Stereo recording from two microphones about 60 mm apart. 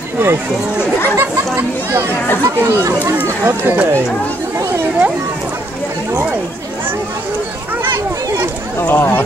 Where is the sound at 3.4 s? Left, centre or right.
Right.